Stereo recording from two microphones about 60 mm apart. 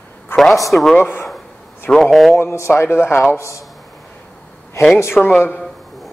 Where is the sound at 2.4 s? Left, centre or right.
Left.